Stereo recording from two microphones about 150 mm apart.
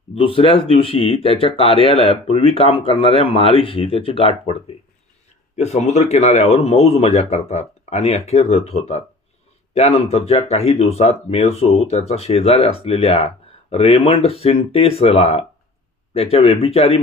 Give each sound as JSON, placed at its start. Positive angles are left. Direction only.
{"t": 0.1, "sound": "speech", "side_deg": 35}